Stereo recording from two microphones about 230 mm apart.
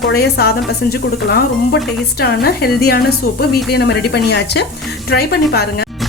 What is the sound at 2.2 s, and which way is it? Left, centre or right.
Speech, left.